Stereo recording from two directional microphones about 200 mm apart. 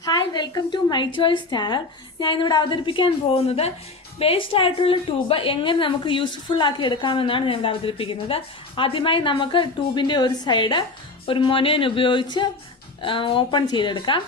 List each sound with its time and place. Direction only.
0.0 s a woman's voice: 20° left (ahead or behind)